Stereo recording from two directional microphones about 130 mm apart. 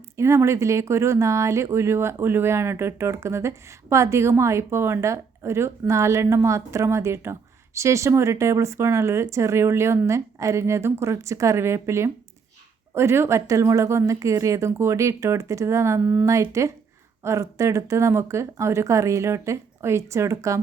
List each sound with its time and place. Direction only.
0.2 s a woman's voice: 20° right (ahead or behind)
16.2 s a woman's voice: 25° right (ahead or behind)